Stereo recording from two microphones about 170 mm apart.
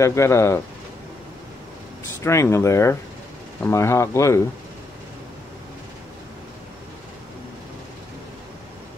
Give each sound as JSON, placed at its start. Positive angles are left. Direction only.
{"t": 0.0, "sound": "speech", "side_deg": 15}
{"t": 2.2, "sound": "speech", "side_deg": 15}